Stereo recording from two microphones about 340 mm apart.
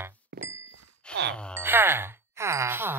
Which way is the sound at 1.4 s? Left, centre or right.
Centre.